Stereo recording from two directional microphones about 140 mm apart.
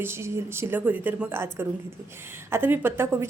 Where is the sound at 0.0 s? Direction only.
20° right (ahead or behind).